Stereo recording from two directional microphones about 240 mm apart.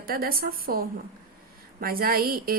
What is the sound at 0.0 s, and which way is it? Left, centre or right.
A woman's voice, right.